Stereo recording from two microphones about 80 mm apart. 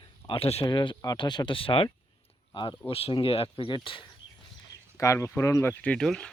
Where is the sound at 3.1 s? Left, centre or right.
Left.